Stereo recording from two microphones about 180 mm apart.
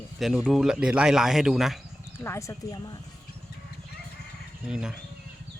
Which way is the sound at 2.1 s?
15° left (ahead or behind).